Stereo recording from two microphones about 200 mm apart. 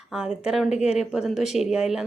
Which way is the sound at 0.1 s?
5° right (ahead or behind).